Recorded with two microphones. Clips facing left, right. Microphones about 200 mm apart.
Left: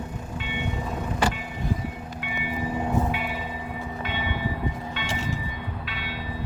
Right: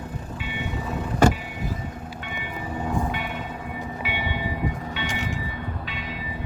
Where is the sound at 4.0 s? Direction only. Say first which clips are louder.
Even; 10° right (ahead or behind).